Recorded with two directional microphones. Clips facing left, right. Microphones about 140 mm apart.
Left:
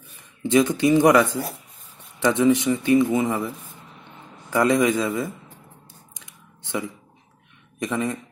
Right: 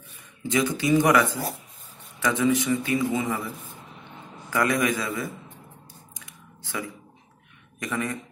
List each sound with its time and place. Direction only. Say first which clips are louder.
0.6 s a man's voice: left 4 dB; 25° left (ahead or behind)
6.1 s a sound: right 2 dB; 20° left (ahead or behind)
7.8 s a man's voice: left 4 dB; 20° left (ahead or behind)